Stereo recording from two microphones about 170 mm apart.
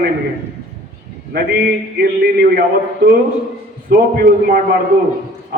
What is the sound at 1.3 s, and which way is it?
A man's voice, 65° right (ahead or behind).